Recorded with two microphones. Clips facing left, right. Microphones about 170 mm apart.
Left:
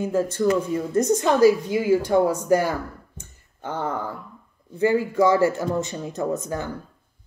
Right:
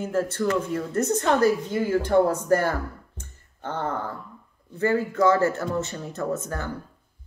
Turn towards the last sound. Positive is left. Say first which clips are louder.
# left 2 dB
turn(degrees=15)  # may be behind; listen again after turning